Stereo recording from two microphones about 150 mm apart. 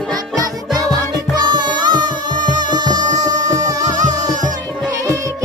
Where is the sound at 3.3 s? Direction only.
55° right (ahead or behind).